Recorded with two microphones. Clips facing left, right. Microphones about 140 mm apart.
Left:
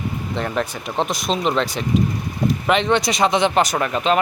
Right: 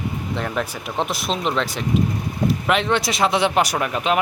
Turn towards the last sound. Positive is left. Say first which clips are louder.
# left 2 dB
turn(degrees=-10)  # may be behind; listen again after turning